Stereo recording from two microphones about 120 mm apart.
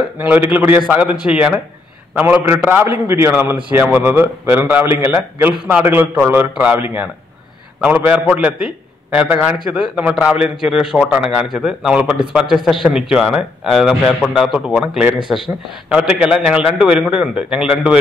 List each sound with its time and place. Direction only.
0.5 s a man's voice: 15° right (ahead or behind)